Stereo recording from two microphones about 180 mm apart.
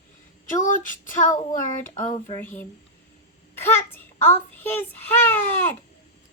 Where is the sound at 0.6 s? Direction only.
45° left (ahead or behind).